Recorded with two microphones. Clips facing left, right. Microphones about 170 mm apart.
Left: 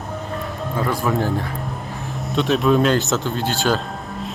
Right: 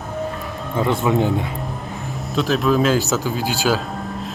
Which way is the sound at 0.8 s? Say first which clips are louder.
Right 3 dB; 25° right (ahead or behind).